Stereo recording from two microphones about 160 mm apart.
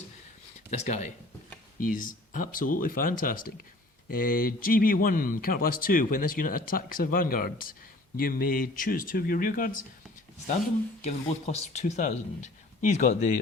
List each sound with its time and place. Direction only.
0.7 s speech: 45° left (ahead or behind)
1.8 s speech: 55° left (ahead or behind)
11.0 s speech: 45° left (ahead or behind)